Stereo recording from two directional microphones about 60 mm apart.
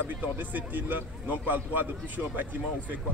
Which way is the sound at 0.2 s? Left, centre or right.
Right.